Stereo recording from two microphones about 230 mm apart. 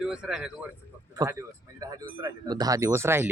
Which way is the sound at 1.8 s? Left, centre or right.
Centre.